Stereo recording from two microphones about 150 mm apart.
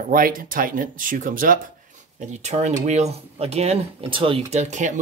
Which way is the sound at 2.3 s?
50° right (ahead or behind).